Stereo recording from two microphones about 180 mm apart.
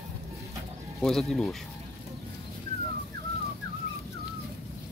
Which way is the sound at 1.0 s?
Centre (ahead or behind).